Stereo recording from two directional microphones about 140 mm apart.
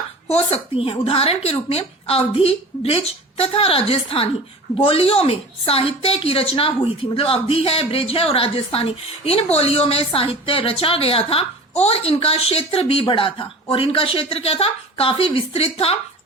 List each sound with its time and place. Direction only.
0.5 s a woman's voice: 40° left (ahead or behind)